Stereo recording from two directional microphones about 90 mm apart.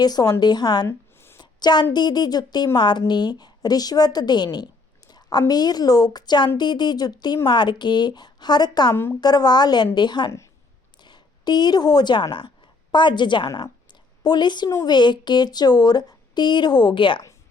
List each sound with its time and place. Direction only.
0.0 s a woman's voice: 45° left (ahead or behind)
0.9 s a sound: 25° left (ahead or behind)
1.4 s a woman's voice: 50° left (ahead or behind)